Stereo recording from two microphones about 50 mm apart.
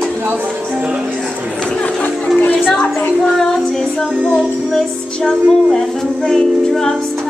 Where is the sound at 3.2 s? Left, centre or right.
Centre.